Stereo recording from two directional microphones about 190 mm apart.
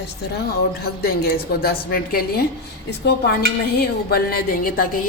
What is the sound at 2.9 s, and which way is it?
Dishes, 60° left (ahead or behind).